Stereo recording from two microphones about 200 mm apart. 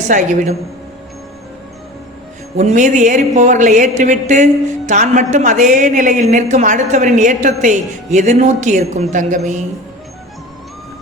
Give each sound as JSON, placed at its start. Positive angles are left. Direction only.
{"t": 0.1, "sound": "a woman's voice", "side_deg": -40}
{"t": 2.6, "sound": "a woman's voice", "side_deg": -35}